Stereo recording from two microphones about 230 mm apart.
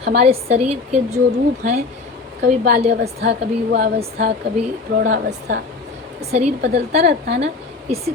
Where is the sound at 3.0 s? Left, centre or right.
Right.